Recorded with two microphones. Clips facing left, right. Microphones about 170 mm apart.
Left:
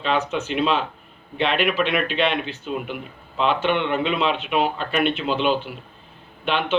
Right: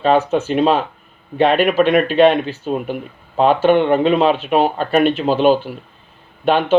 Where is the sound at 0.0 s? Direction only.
45° right (ahead or behind).